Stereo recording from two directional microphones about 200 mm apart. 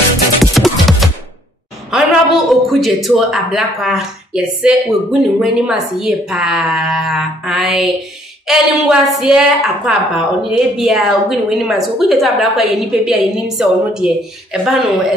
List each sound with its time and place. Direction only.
0.4 s music: centre (ahead or behind)
1.9 s a woman's voice: centre (ahead or behind)